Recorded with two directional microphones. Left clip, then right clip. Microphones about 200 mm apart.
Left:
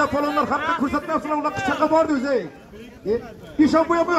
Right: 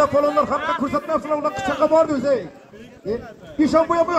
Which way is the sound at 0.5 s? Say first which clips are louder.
Even; 40° right (ahead or behind).